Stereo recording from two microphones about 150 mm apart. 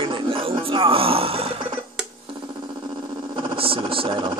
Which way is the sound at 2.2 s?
30° right (ahead or behind).